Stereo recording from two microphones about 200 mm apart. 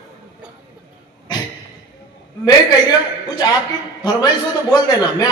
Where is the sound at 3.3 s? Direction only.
20° left (ahead or behind).